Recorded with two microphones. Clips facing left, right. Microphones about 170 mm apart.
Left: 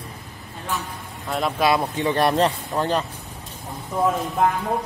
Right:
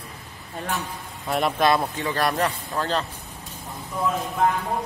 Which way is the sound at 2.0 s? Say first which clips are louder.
Left 5 dB; 20° left (ahead or behind).